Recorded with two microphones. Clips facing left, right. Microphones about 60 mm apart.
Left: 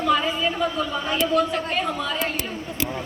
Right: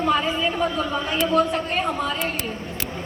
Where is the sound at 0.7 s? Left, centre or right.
Right.